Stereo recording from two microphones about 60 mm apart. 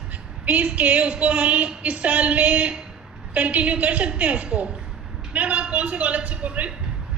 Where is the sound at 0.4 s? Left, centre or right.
Right.